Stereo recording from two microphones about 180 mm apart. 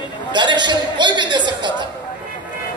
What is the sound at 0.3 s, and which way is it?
A man's voice, 25° right (ahead or behind).